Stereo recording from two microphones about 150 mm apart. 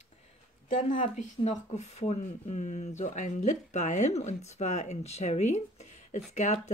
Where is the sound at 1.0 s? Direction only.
50° left (ahead or behind).